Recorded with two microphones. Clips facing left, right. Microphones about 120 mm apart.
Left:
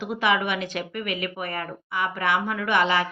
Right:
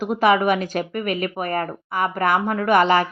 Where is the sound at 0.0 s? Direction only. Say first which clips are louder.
Right 6 dB; 45° right (ahead or behind).